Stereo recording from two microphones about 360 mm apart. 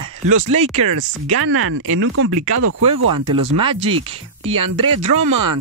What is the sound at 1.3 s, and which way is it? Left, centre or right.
Speech, right.